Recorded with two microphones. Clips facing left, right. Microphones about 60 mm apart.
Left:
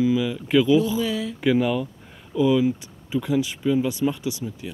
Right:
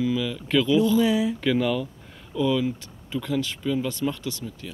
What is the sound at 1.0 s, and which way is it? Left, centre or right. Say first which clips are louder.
Speech: right 4 dB; centre.